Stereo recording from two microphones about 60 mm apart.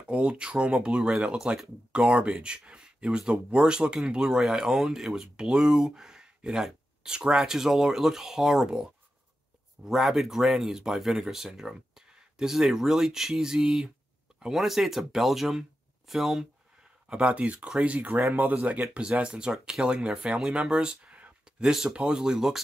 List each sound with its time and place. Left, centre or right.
0.0 s speech: centre
9.8 s speech: centre
17.1 s speech: centre